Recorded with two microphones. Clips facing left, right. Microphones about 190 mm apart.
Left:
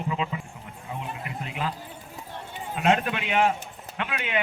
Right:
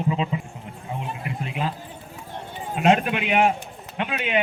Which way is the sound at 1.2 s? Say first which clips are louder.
Right 5 dB; 20° right (ahead or behind).